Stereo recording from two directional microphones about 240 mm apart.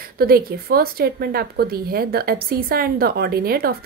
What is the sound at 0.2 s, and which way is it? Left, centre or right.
A woman's voice, right.